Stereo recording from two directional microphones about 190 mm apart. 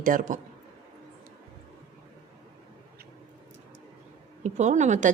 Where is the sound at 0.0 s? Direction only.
45° right (ahead or behind).